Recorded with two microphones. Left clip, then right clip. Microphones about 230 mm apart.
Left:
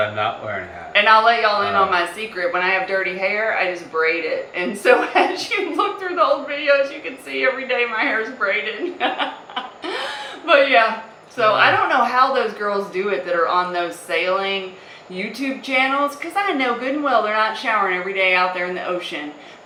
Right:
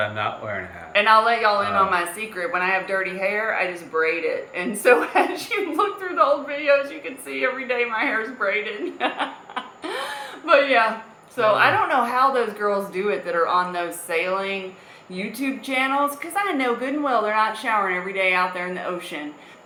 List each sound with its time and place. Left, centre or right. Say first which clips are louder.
0.0 s a man's voice: left 4 dB; centre
7.3 s a man's voice: left 4 dB; centre
9.0 s laughter: left 3 dB; right
10.4 s a man's voice: left 3 dB; right
15.6 s a man's voice: left 3 dB; centre